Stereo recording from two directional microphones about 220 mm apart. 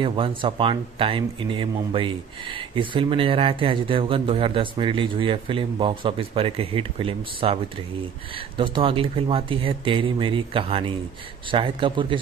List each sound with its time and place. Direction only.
0.0 s speech: 25° right (ahead or behind)